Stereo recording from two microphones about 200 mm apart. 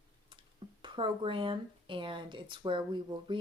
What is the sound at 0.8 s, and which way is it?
A woman's voice, 25° right (ahead or behind).